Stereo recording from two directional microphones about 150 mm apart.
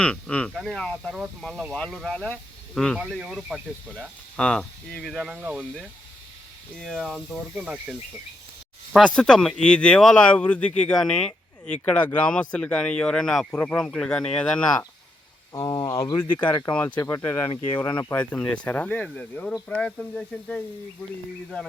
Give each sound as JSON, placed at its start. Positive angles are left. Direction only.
{"t": 0.0, "sound": "speech", "side_deg": 5}
{"t": 6.7, "sound": "speech", "side_deg": 5}
{"t": 15.5, "sound": "speech", "side_deg": 25}
{"t": 16.2, "sound": "speech", "side_deg": 10}
{"t": 16.5, "sound": "speech", "side_deg": 25}